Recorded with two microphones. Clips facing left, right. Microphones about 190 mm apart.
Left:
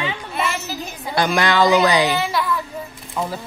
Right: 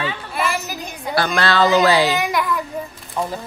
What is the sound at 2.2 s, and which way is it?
Speech, 15° right (ahead or behind).